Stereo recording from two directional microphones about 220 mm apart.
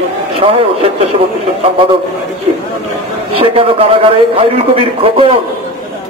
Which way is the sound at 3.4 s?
25° right (ahead or behind).